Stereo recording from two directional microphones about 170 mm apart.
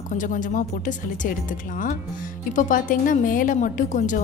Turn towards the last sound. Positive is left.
turn(degrees=50)  # may be behind; listen again after turning